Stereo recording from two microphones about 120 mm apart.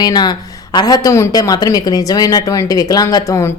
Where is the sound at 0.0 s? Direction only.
35° left (ahead or behind).